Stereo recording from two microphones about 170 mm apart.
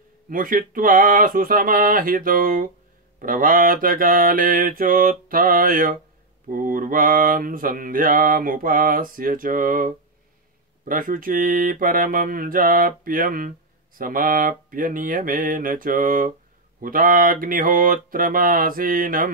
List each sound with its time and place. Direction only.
0.3 s mantra: 55° right (ahead or behind)